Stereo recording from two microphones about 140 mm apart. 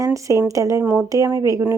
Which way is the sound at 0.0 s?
25° right (ahead or behind).